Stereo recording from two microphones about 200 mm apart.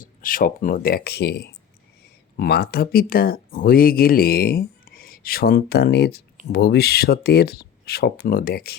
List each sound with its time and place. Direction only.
0.0 s speech: 45° left (ahead or behind)